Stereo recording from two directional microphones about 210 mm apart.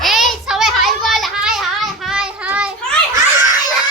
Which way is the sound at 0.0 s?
Centre (ahead or behind).